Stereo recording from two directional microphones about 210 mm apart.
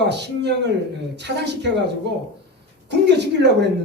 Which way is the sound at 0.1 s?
55° right (ahead or behind).